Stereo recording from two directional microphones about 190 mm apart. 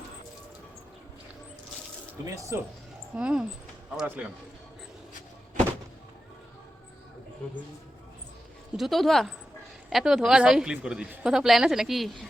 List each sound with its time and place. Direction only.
2.2 s speech: 15° right (ahead or behind)
3.2 s a woman's voice: 5° right (ahead or behind)
8.7 s a woman's voice: centre (ahead or behind)